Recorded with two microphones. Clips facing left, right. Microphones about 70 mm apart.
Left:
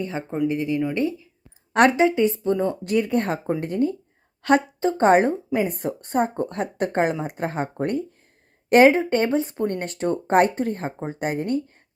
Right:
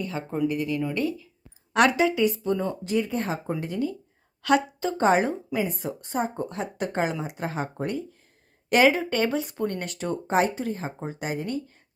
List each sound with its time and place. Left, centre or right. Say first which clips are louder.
0.0 s speech: left 2 dB; left
2.8 s speech: left 4 dB; left
8.7 s speech: left 5 dB; left